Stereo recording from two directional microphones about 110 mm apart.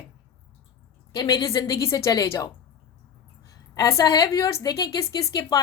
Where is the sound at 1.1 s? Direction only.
35° left (ahead or behind).